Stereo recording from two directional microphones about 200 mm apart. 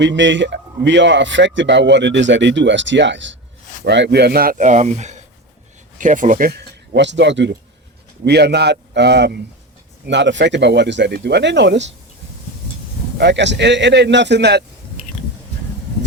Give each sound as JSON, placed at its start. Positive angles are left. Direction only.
{"t": 0.0, "sound": "a man's voice", "side_deg": -65}
{"t": 13.1, "sound": "speech", "side_deg": -60}